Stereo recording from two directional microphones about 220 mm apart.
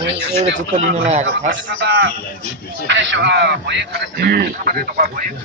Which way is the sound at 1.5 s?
55° right (ahead or behind).